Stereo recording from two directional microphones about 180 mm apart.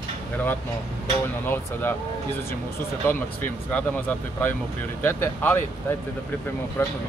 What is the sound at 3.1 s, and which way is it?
Speech, 10° left (ahead or behind).